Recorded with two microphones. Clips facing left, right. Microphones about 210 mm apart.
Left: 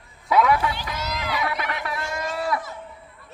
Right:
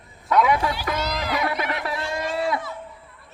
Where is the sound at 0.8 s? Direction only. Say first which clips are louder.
Right 5 dB; 60° right (ahead or behind).